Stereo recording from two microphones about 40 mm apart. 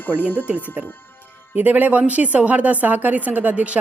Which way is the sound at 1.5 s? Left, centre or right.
Right.